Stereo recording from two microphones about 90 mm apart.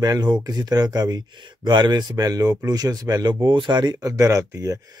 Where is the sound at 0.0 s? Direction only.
50° right (ahead or behind).